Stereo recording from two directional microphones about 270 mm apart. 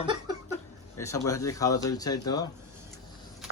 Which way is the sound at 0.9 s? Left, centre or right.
Centre.